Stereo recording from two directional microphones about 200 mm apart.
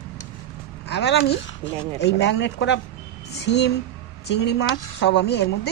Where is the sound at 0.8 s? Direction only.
55° left (ahead or behind).